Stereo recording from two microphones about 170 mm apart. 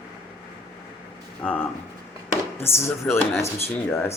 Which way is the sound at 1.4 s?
5° left (ahead or behind).